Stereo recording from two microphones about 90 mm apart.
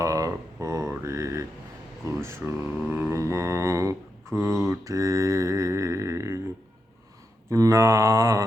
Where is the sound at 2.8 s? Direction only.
25° right (ahead or behind).